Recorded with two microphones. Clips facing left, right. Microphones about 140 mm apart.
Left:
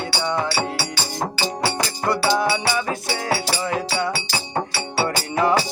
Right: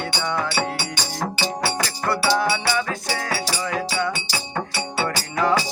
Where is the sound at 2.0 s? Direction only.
25° left (ahead or behind).